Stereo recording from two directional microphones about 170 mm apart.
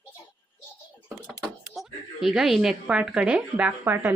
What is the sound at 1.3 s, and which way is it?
A woman's voice, centre (ahead or behind).